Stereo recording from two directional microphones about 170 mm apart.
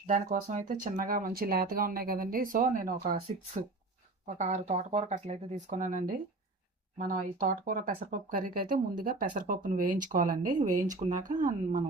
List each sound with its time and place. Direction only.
0.1 s speech: 45° right (ahead or behind)
4.4 s speech: 40° right (ahead or behind)